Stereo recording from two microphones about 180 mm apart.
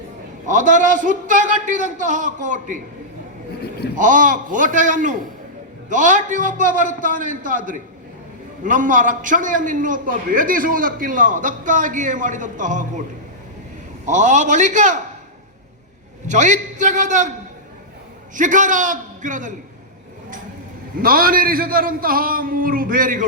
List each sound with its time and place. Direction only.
0.4 s a man's voice: 45° right (ahead or behind)
3.9 s a man's voice: 45° right (ahead or behind)
16.2 s a man's voice: 45° right (ahead or behind)
18.3 s a man's voice: 45° right (ahead or behind)
20.9 s a man's voice: 50° right (ahead or behind)